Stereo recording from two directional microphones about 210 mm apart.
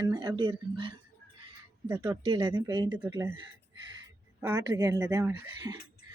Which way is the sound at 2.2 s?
25° right (ahead or behind).